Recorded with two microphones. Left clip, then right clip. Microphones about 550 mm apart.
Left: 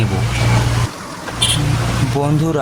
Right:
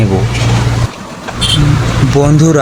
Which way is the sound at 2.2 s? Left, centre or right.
Left.